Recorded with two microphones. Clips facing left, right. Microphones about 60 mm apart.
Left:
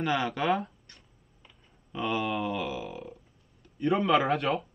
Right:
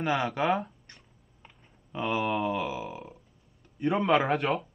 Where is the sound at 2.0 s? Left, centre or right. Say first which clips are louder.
Right 2 dB; centre.